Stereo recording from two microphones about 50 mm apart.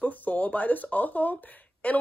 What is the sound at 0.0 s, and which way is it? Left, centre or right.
Speech, left.